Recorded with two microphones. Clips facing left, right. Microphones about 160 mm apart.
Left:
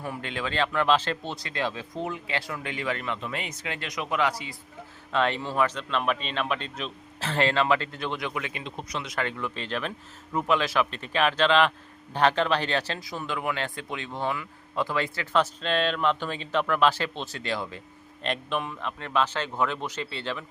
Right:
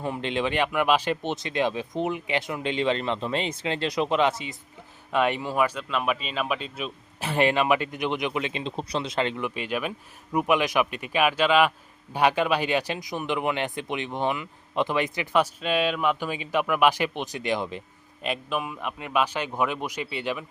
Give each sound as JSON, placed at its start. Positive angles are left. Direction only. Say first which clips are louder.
{"t": 0.0, "sound": "speech", "louder": "right 5 dB", "side_deg": -20}
{"t": 18.2, "sound": "speech", "louder": "right 1 dB", "side_deg": -5}